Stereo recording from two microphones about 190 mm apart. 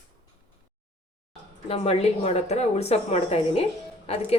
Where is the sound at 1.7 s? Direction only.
35° left (ahead or behind).